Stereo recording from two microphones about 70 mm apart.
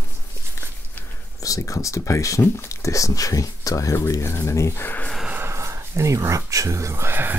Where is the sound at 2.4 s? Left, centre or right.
Left.